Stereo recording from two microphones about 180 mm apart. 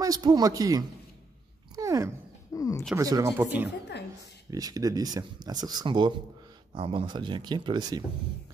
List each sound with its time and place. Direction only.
0.0 s speech: 20° right (ahead or behind)
1.8 s dog: 15° right (ahead or behind)
2.5 s speech: 15° left (ahead or behind)
3.0 s speech: 20° right (ahead or behind)
4.5 s speech: 20° right (ahead or behind)